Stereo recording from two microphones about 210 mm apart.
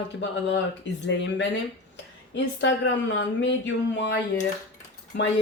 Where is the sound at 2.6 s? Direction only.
60° left (ahead or behind).